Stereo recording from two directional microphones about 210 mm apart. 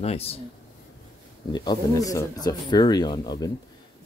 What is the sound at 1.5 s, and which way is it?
Speech, 20° left (ahead or behind).